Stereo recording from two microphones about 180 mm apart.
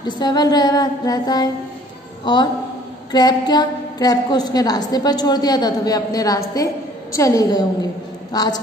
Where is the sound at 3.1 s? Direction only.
20° left (ahead or behind).